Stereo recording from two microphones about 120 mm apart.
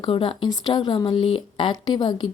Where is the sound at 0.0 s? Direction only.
45° left (ahead or behind).